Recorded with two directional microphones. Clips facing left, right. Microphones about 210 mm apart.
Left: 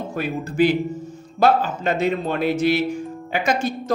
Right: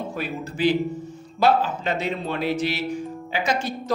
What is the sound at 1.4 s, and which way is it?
Speech, 50° left (ahead or behind).